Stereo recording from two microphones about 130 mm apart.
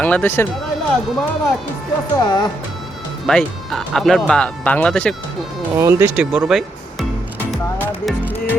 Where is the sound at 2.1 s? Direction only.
35° left (ahead or behind).